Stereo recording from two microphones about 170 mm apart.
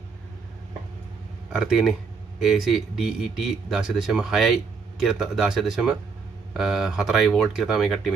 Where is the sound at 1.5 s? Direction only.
Centre (ahead or behind).